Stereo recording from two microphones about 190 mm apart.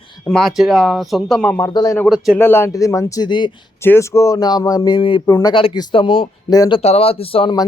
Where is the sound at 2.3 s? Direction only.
10° left (ahead or behind).